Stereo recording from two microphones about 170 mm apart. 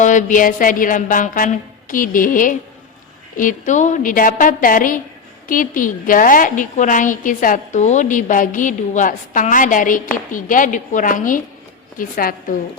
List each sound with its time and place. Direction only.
0.0 s a woman's voice: 50° left (ahead or behind)